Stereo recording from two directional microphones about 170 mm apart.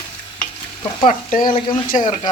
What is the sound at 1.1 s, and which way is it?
Speech, 50° left (ahead or behind).